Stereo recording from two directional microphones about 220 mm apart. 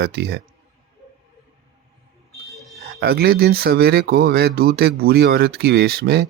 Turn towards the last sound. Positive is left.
turn(degrees=-45)  # may be behind; listen again after turning